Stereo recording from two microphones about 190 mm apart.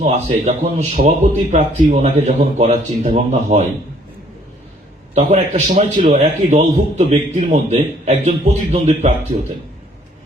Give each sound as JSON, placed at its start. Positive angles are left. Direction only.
{"t": 0.0, "sound": "a man's voice", "side_deg": -40}
{"t": 5.1, "sound": "a man's voice", "side_deg": -40}